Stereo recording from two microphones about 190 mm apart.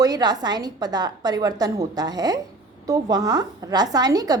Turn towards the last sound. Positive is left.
turn(degrees=-20)  # may be behind; listen again after turning